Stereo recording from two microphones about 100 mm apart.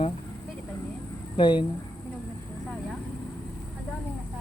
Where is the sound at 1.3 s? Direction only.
50° left (ahead or behind).